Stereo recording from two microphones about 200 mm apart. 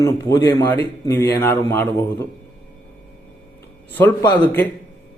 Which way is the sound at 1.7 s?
15° left (ahead or behind).